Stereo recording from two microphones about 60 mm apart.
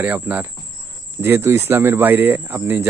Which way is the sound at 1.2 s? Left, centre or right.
Right.